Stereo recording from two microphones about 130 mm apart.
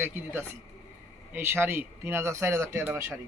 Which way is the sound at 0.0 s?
15° right (ahead or behind).